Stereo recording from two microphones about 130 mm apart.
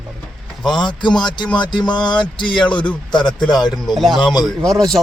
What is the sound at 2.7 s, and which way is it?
Speech, 10° left (ahead or behind).